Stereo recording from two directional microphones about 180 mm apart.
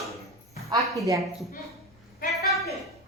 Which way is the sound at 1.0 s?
15° right (ahead or behind).